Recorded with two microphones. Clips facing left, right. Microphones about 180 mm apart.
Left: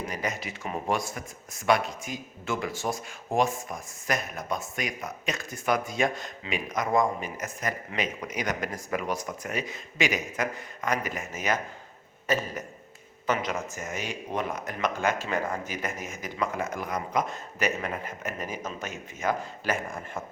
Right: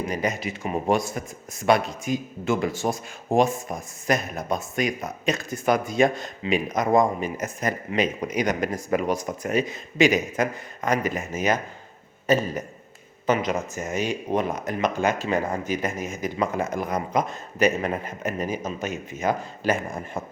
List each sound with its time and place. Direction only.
0.1 s speech: 20° right (ahead or behind)
13.2 s speech: 20° right (ahead or behind)